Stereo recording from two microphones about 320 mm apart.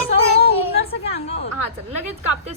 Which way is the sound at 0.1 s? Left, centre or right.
Centre.